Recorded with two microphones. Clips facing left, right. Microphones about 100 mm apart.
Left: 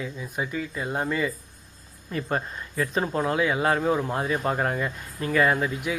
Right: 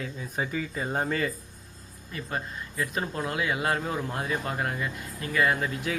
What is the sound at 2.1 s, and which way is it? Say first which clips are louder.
Speech: left 6 dB; 40° left (ahead or behind).